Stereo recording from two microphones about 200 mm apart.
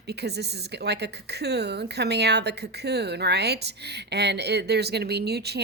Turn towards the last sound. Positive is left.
turn(degrees=-55)  # may be behind; listen again after turning